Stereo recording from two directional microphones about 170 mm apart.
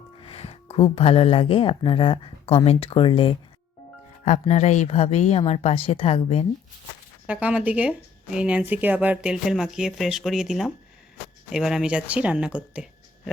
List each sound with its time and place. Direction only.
0.2 s speech: 35° left (ahead or behind)
4.3 s a woman's voice: 40° left (ahead or behind)
7.3 s speech: 5° right (ahead or behind)
12.5 s a sound: 5° right (ahead or behind)